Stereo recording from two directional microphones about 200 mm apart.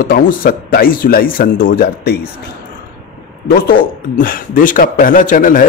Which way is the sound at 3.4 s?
45° left (ahead or behind).